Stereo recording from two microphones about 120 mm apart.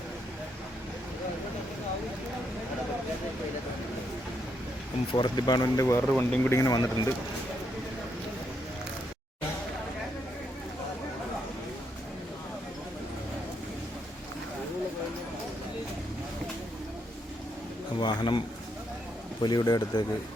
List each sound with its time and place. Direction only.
5.1 s speech: 35° left (ahead or behind)
6.1 s speech: 15° left (ahead or behind); by 7.1 s 30° left (ahead or behind)
18.0 s a sound: 40° left (ahead or behind)
19.4 s speech: 35° left (ahead or behind)